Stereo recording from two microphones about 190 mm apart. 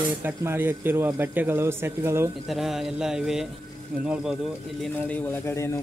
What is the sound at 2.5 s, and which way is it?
Speech, centre (ahead or behind).